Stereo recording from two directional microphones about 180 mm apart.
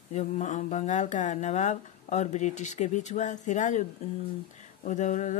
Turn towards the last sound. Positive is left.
turn(degrees=45)  # may be behind; listen again after turning